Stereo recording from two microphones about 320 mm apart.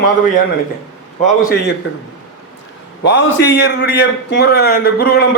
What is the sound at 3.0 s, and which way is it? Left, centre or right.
A man's voice, left.